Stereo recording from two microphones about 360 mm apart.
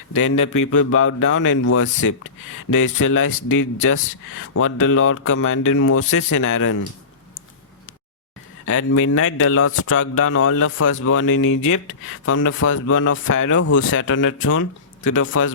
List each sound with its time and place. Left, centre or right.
0.1 s speech: left
8.6 s speech: left